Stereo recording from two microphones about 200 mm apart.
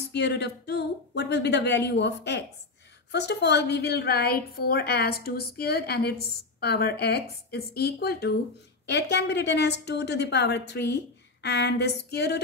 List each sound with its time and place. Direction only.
0.1 s a woman's voice: 55° left (ahead or behind)